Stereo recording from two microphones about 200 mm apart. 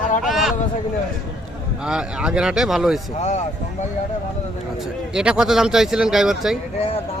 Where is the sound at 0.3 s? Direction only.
Centre (ahead or behind).